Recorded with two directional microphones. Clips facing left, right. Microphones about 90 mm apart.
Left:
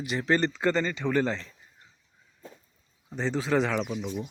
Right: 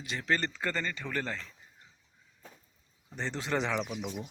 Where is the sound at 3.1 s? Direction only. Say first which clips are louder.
Left 7 dB; 15° left (ahead or behind).